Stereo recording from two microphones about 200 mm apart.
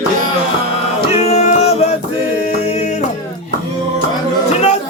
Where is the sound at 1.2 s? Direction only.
35° left (ahead or behind).